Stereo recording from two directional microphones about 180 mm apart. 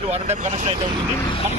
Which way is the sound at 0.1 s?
40° right (ahead or behind).